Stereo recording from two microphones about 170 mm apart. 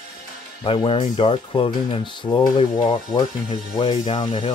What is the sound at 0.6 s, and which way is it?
Speech, 30° left (ahead or behind).